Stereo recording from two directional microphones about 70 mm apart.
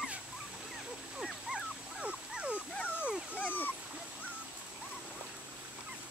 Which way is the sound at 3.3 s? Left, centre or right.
Left.